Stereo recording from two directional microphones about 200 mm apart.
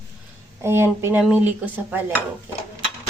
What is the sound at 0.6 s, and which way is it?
Speech, 10° right (ahead or behind).